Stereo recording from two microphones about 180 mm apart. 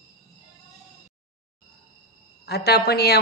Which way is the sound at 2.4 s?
65° left (ahead or behind).